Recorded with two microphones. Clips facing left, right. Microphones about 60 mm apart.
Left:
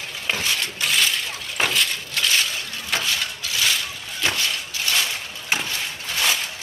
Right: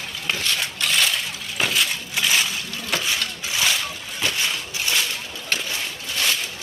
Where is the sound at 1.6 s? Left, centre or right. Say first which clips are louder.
Even; centre.